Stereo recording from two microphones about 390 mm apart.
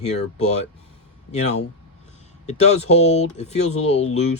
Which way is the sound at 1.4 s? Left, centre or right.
Centre.